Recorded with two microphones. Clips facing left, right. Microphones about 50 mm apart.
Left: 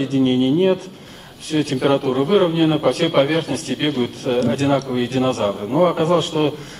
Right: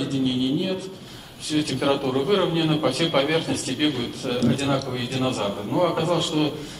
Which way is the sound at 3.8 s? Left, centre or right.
Left.